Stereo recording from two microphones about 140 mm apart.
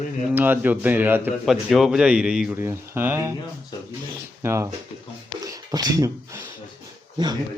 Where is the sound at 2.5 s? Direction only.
15° right (ahead or behind).